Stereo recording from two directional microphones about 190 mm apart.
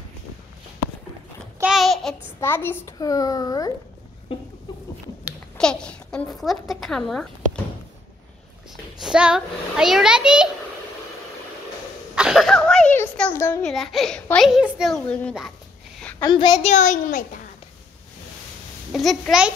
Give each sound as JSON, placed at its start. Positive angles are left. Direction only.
{"t": 1.6, "sound": "babbling", "side_deg": 0}
{"t": 2.4, "sound": "a child's voice", "side_deg": 10}
{"t": 4.3, "sound": "a sound", "side_deg": 30}
{"t": 5.6, "sound": "speech", "side_deg": 5}
{"t": 9.0, "sound": "speech", "side_deg": -5}
{"t": 12.2, "sound": "cough", "side_deg": 0}
{"t": 13.7, "sound": "speech", "side_deg": 0}
{"t": 16.0, "sound": "a sound", "side_deg": 5}
{"t": 16.3, "sound": "a child's voice", "side_deg": 25}
{"t": 16.6, "sound": "a child's voice", "side_deg": 40}
{"t": 18.9, "sound": "speech", "side_deg": 0}